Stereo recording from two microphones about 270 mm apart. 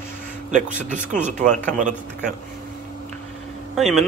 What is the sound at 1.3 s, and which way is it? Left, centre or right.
Speech, right.